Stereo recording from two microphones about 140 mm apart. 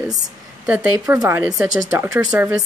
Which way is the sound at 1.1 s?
20° right (ahead or behind).